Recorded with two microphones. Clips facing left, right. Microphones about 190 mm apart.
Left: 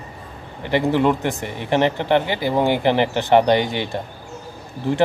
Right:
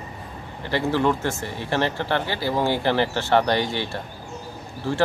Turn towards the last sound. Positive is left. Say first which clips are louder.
# left 4 dB
turn(degrees=20)  # may be behind; listen again after turning